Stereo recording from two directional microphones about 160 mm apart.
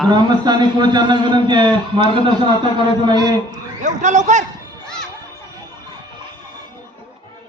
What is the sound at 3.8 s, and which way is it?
Speech, 50° right (ahead or behind).